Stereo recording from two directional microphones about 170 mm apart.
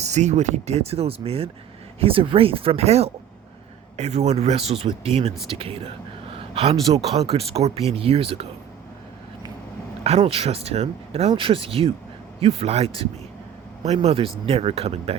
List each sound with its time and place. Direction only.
0.0 s speech: 40° right (ahead or behind)
6.3 s a sound: 35° right (ahead or behind)
6.9 s speech: 35° right (ahead or behind)
10.0 s speech: 35° right (ahead or behind)